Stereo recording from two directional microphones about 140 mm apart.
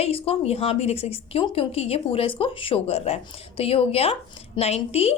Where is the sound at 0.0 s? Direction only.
45° left (ahead or behind).